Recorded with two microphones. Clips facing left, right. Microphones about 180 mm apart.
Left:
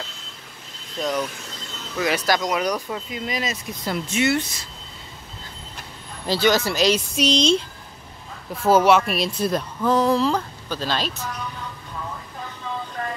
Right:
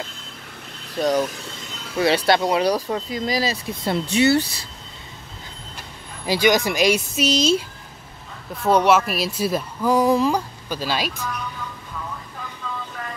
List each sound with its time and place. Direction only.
0.9 s speech: 35° right (ahead or behind)
6.2 s speech: 15° right (ahead or behind)
8.6 s speech: centre (ahead or behind)